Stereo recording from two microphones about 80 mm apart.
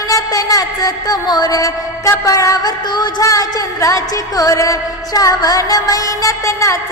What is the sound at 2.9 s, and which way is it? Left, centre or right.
Music, left.